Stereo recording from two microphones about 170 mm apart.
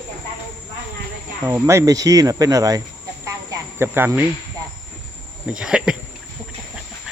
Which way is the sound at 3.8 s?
10° right (ahead or behind).